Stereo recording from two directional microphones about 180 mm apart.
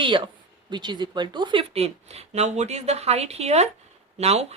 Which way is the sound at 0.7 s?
25° right (ahead or behind).